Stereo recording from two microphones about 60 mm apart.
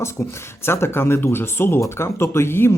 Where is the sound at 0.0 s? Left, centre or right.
Left.